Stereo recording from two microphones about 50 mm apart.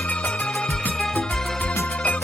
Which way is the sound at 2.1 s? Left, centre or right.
Left.